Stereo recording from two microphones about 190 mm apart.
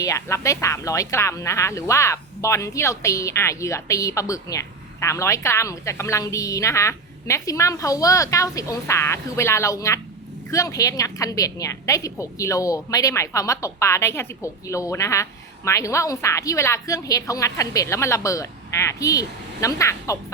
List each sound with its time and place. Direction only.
0.0 s speech: 15° left (ahead or behind)